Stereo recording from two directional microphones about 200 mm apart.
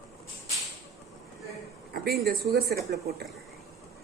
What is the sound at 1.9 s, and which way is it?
Speech, 55° right (ahead or behind).